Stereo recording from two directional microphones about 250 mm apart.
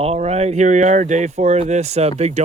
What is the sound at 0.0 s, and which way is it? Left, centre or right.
Speech, right.